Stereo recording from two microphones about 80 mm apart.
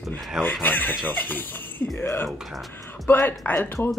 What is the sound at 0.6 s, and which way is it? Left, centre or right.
Speech, left.